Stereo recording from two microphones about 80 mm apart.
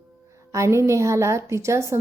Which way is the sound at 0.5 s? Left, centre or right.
Right.